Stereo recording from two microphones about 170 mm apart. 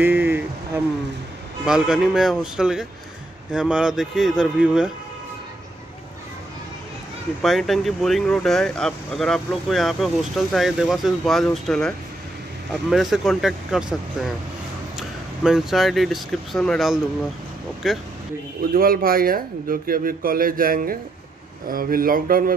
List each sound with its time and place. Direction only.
0.0 s a sound: 10° right (ahead or behind)
1.7 s speech: 5° right (ahead or behind)
7.4 s speech: centre (ahead or behind)
18.7 s speech: 60° right (ahead or behind)